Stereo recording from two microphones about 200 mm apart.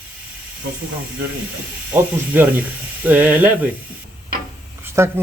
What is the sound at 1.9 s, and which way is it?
Speech, 10° right (ahead or behind).